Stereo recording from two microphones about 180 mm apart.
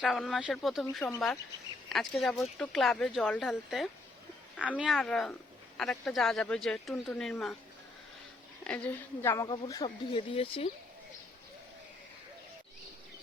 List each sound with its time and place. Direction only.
0.0 s speech: centre (ahead or behind)
8.6 s speech: 5° left (ahead or behind)
9.3 s speech: 15° left (ahead or behind); by 10.7 s 30° left (ahead or behind)